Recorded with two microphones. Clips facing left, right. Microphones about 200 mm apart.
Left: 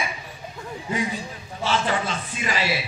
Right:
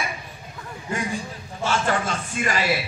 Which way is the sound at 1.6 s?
50° right (ahead or behind).